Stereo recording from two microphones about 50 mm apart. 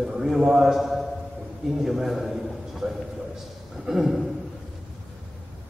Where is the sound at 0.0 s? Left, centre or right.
Centre.